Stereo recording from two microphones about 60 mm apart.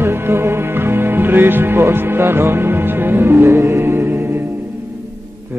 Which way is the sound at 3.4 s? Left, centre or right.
Right.